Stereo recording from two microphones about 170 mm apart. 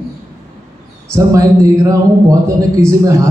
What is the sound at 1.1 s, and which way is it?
A man's voice, 20° right (ahead or behind).